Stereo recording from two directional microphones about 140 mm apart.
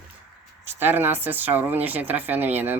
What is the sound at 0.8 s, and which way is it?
Speech, 15° right (ahead or behind).